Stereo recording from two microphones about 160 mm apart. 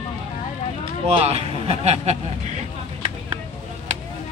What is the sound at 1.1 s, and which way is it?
Speech, 40° right (ahead or behind).